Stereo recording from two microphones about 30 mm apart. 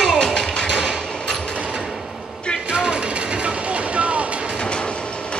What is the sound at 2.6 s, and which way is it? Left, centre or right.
Vehicle, right.